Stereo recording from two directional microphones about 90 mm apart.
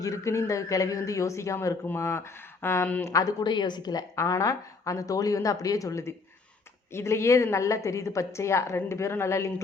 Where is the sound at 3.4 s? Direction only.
55° left (ahead or behind).